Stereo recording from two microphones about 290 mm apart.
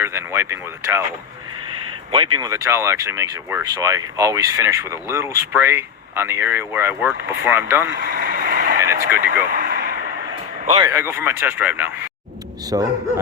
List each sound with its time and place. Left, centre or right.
0.0 s speech: centre
2.1 s speech: centre
7.9 s vehicle: right
8.8 s speech: centre
9.5 s a sound: right
10.9 s speech: centre